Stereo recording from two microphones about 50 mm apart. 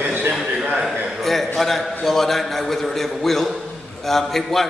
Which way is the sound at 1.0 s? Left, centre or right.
Centre.